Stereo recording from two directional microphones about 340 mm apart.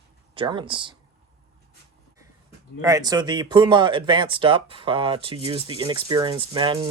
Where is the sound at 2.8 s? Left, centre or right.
Centre.